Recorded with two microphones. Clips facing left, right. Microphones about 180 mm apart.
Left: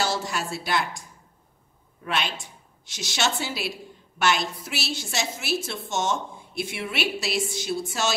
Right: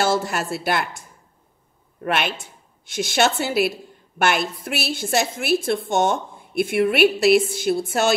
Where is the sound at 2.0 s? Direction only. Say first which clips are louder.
Right 5 dB; 60° right (ahead or behind).